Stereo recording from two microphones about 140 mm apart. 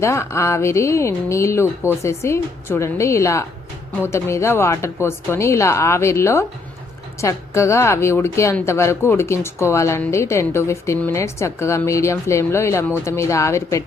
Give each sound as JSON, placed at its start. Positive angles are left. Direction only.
{"t": 0.0, "sound": "a woman's voice", "side_deg": 20}